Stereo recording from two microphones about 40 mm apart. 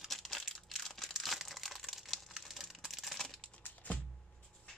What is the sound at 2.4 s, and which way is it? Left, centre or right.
Computer keyboard, centre.